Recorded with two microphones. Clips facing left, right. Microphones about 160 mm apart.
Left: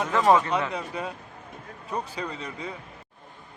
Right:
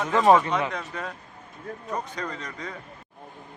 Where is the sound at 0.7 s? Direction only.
10° left (ahead or behind).